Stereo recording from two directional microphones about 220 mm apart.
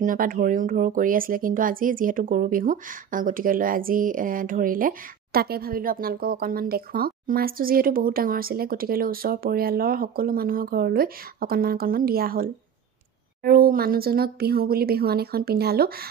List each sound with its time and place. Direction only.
0.0 s speech: 40° right (ahead or behind)